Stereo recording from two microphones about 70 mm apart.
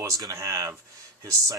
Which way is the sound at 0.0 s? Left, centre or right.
Right.